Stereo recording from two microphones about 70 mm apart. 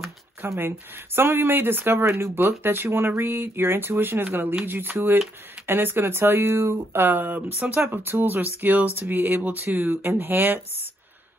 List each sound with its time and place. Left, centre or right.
0.4 s speech: right